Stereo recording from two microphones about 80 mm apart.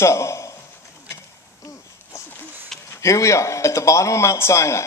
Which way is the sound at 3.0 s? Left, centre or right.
Left.